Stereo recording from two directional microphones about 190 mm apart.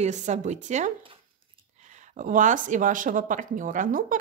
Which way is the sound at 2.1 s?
40° right (ahead or behind).